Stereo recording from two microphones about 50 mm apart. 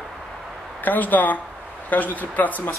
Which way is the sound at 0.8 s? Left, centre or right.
Left.